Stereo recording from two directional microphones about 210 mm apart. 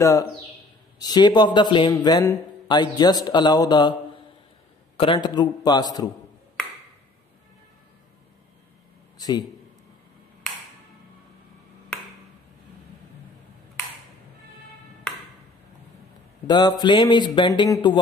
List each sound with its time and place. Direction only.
0.0 s a man's voice: 15° left (ahead or behind)
4.9 s speech: 25° left (ahead or behind)
9.2 s a man's voice: 20° left (ahead or behind)
16.4 s speech: 20° left (ahead or behind)